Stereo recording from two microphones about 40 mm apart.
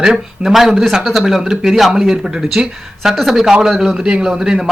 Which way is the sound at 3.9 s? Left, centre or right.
Right.